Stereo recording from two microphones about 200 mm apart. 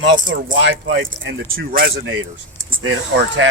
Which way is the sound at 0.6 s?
70° right (ahead or behind).